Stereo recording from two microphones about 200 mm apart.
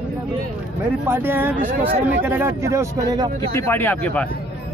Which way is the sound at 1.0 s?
10° right (ahead or behind).